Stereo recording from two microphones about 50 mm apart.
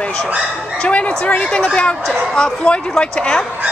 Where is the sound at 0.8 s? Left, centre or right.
Left.